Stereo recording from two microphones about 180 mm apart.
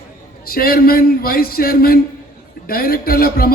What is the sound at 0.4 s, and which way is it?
A man's voice, 55° left (ahead or behind).